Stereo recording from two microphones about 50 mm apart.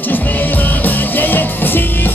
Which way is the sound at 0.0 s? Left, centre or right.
Left.